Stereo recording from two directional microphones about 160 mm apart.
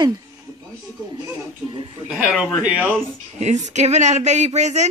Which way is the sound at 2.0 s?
5° right (ahead or behind).